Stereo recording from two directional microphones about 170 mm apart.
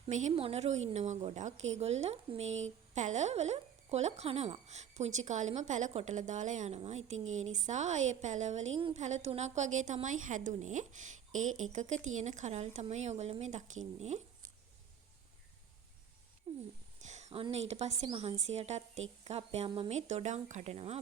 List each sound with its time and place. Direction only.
0.1 s a woman's voice: 45° right (ahead or behind)
16.5 s speech: 30° right (ahead or behind)
17.1 s a sound: 40° right (ahead or behind)
17.4 s a woman's voice: 40° right (ahead or behind)